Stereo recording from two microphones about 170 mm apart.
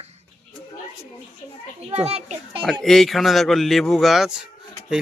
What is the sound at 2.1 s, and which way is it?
Speech, 35° right (ahead or behind).